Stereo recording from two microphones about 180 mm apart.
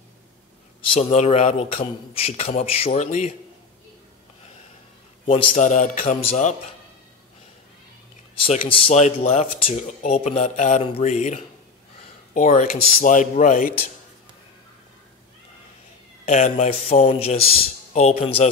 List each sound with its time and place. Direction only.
0.8 s speech: 35° left (ahead or behind)
5.2 s speech: 35° left (ahead or behind)
8.4 s speech: 30° left (ahead or behind); by 13.7 s 45° left (ahead or behind)
16.3 s speech: 40° left (ahead or behind)